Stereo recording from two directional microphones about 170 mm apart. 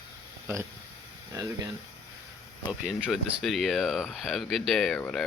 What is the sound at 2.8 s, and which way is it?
Speech, 5° right (ahead or behind).